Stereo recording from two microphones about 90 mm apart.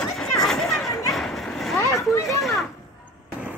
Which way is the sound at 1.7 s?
35° left (ahead or behind).